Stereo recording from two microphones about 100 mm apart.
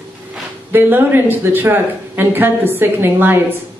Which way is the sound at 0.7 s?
20° right (ahead or behind).